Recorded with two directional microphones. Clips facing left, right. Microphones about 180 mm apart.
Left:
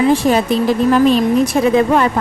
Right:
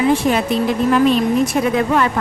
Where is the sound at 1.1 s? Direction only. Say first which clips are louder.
Left 2 dB; 30° left (ahead or behind).